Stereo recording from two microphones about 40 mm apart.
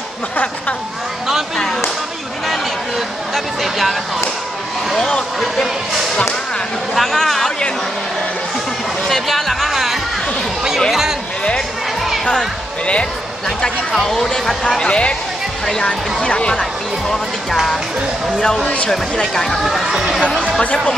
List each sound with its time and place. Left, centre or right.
3.3 s speech: centre
7.0 s speech: centre
9.0 s music: centre
10.9 s a sound: centre
14.0 s speech: centre
14.8 s speech: left
18.4 s speech: centre
19.6 s speech: centre
20.6 s speech: left